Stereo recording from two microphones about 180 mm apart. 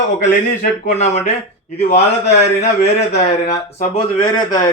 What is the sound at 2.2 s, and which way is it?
Speech, 40° left (ahead or behind).